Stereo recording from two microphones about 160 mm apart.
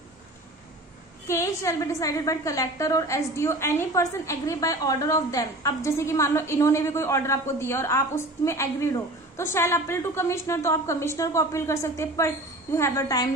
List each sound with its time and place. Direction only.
1.2 s a woman's voice: 20° left (ahead or behind)